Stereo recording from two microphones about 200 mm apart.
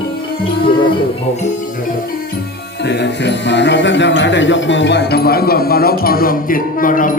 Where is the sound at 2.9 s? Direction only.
60° left (ahead or behind).